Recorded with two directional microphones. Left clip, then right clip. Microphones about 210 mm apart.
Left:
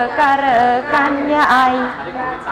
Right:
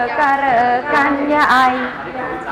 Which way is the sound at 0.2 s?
10° left (ahead or behind).